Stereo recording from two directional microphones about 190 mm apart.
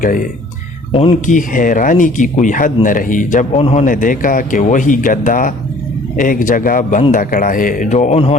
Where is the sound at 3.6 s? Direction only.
30° left (ahead or behind).